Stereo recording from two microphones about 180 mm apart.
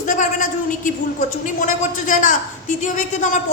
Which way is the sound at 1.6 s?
45° left (ahead or behind).